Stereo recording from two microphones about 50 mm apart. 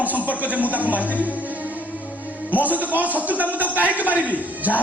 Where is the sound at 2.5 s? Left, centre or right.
Right.